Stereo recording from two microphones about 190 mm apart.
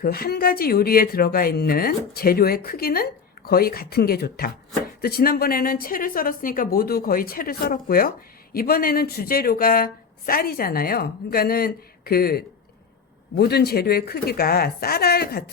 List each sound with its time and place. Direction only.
0.0 s a woman's voice: 55° left (ahead or behind)